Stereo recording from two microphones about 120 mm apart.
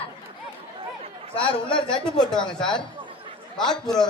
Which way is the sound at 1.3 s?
45° left (ahead or behind).